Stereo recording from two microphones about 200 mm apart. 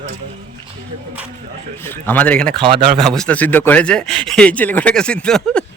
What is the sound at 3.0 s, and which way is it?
Speech, 5° left (ahead or behind).